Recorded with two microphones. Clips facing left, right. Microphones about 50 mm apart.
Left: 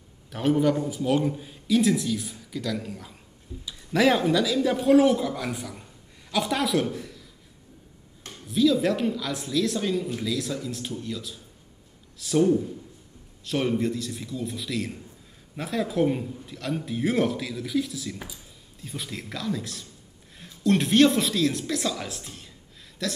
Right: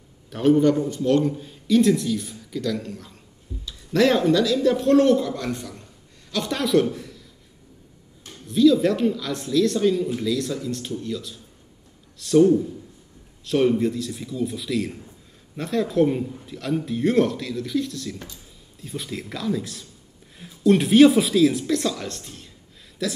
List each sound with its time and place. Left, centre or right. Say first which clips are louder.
0.3 s a man's voice: right 5 dB; centre
8.5 s a man's voice: right 5 dB; centre